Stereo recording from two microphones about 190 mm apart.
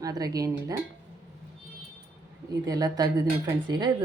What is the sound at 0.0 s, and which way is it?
Speech, 20° right (ahead or behind).